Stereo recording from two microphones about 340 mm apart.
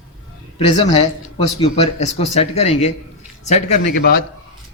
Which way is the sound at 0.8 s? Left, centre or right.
Centre.